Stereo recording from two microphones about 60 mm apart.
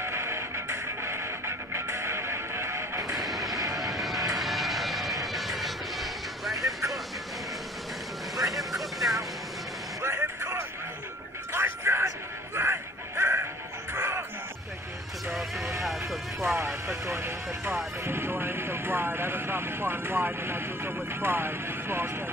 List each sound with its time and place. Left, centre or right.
0.0 s music: right
3.2 s a sound: centre
3.5 s vehicle: right
3.8 s music: centre
4.4 s vehicle: centre
8.5 s vehicle: centre
10.0 s vehicle: right
11.5 s a sound: right
13.9 s music: right
15.3 s music: centre
16.8 s vehicle: right